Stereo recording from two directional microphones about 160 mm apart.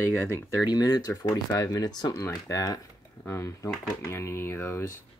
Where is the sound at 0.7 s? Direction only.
25° left (ahead or behind).